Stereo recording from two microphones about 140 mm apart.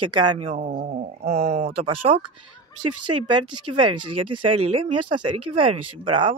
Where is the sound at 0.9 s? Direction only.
55° right (ahead or behind).